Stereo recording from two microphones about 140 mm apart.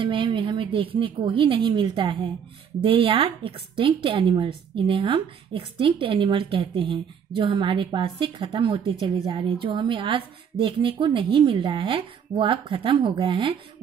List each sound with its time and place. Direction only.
0.1 s a woman's voice: 35° right (ahead or behind)